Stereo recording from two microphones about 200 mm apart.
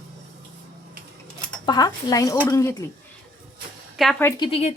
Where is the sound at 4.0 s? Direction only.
5° left (ahead or behind).